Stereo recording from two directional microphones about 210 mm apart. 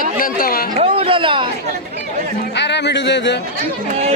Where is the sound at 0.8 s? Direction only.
25° right (ahead or behind).